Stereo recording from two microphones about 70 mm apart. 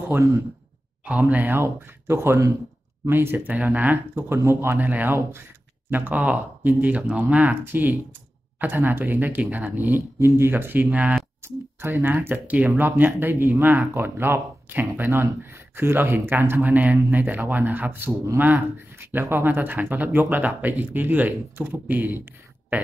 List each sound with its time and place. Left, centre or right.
0.1 s speech: right
4.8 s speech: right
11.4 s speech: right